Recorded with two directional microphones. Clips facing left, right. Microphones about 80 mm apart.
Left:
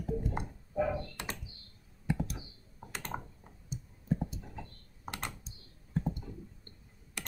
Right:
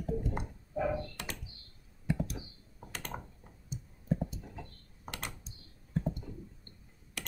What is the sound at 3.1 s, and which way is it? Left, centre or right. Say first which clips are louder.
Clicking: left 5 dB; centre.